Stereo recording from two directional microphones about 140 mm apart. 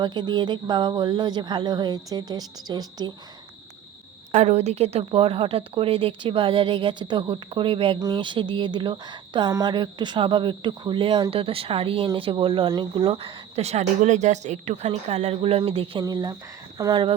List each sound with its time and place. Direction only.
0.0 s speech: 30° right (ahead or behind)
4.3 s speech: 55° right (ahead or behind); by 16.0 s 40° right (ahead or behind)
16.0 s speech: 30° right (ahead or behind)